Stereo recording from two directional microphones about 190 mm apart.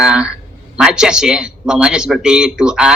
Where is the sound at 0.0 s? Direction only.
5° right (ahead or behind).